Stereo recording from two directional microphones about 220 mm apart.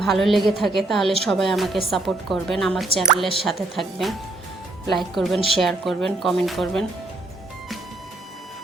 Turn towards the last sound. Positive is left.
turn(degrees=0)  # may be behind; listen again after turning